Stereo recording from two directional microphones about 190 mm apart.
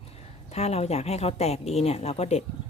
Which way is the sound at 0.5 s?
35° left (ahead or behind).